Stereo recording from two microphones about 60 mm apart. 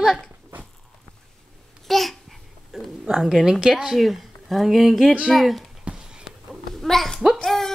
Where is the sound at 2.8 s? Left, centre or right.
Centre.